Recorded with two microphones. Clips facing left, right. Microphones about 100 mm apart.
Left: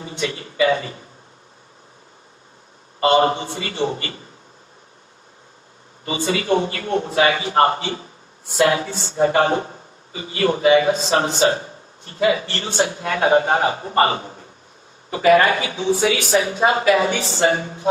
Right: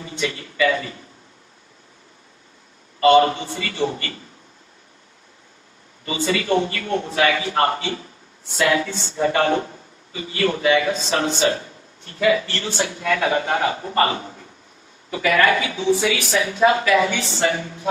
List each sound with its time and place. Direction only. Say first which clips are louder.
0.2 s a man's voice: left 1 dB; 30° left (ahead or behind)
3.0 s a man's voice: right 2 dB; 30° left (ahead or behind)
6.1 s a man's voice: left 1 dB; 35° left (ahead or behind)
15.1 s a man's voice: left 4 dB; 35° left (ahead or behind)